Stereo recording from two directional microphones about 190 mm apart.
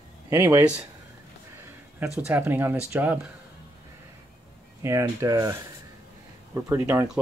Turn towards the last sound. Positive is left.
turn(degrees=-15)  # may be behind; listen again after turning